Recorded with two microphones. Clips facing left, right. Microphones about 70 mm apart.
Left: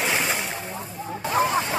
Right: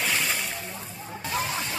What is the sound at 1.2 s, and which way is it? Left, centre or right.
Music, left.